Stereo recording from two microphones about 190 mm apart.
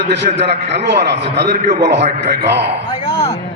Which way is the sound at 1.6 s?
40° right (ahead or behind).